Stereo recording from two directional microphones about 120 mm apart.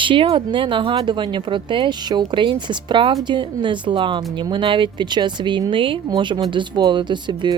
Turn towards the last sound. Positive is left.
turn(degrees=-40)  # may be behind; listen again after turning